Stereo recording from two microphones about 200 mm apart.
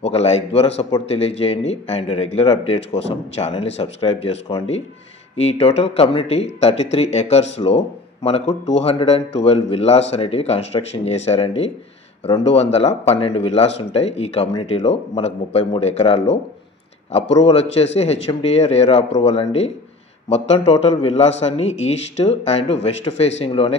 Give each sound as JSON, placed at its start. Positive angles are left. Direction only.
{"t": 0.0, "sound": "speech", "side_deg": 30}